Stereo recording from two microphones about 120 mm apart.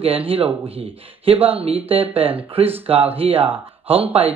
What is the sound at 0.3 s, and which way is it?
Speech, 55° right (ahead or behind).